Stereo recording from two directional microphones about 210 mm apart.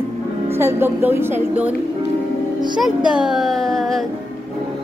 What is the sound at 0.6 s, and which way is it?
A woman's voice, 10° right (ahead or behind).